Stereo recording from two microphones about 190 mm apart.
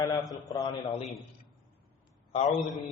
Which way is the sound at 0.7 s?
35° left (ahead or behind).